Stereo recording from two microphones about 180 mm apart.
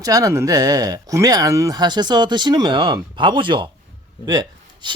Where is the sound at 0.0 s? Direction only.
20° right (ahead or behind).